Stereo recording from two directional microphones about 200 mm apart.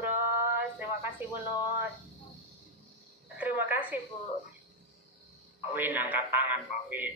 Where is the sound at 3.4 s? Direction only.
10° right (ahead or behind).